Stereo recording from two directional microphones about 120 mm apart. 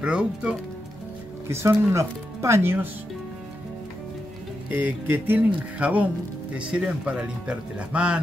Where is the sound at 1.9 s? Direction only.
25° right (ahead or behind).